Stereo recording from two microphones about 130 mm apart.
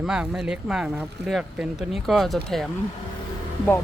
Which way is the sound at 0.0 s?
5° right (ahead or behind).